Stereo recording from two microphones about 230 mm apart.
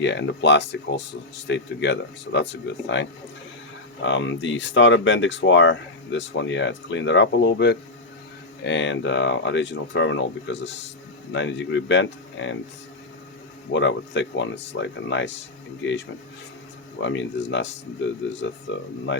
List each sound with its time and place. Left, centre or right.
0.0 s speech: left
13.7 s speech: left
17.0 s speech: left